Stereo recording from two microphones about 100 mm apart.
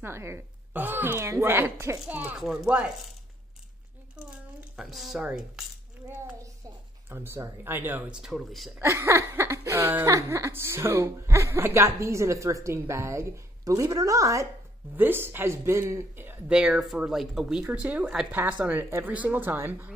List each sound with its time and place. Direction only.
0.0 s speech: 25° right (ahead or behind)
2.3 s speech: 5° right (ahead or behind)
4.7 s speech: centre (ahead or behind)
7.1 s speech: 25° right (ahead or behind)
8.1 s speech: 5° right (ahead or behind)
8.8 s speech: 30° right (ahead or behind)
15.0 s speech: 20° right (ahead or behind)
16.4 s speech: 10° right (ahead or behind)